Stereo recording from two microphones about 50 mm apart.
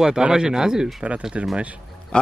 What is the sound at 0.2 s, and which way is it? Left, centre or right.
Speech, centre.